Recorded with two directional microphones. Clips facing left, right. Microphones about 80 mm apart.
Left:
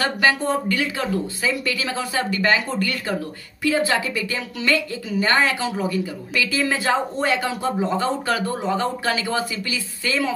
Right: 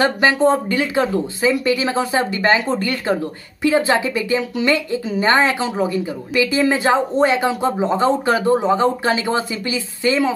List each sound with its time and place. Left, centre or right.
0.0 s a woman's voice: right